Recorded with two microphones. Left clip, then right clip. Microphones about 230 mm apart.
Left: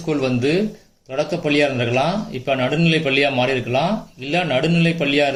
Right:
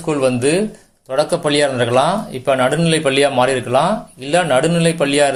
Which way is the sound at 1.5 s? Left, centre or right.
Right.